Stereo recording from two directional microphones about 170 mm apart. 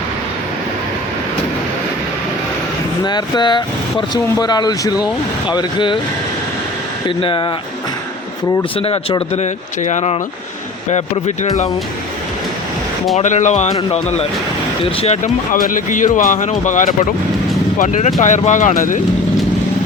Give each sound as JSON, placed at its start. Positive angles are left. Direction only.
{"t": 3.0, "sound": "speech", "side_deg": 25}
{"t": 7.2, "sound": "speech", "side_deg": 30}
{"t": 8.8, "sound": "speech", "side_deg": 35}
{"t": 13.1, "sound": "speech", "side_deg": 45}
{"t": 15.5, "sound": "speech", "side_deg": 50}